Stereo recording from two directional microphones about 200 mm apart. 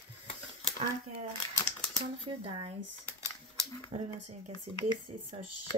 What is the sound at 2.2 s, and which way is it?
Speech, 30° right (ahead or behind).